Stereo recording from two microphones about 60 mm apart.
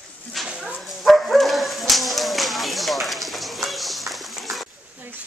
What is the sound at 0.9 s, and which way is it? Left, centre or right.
Bow-wow, centre.